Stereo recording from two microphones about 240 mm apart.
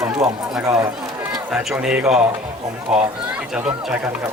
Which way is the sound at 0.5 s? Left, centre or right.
Centre.